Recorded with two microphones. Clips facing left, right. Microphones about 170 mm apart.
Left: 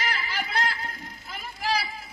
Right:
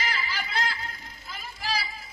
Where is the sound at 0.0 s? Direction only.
55° left (ahead or behind).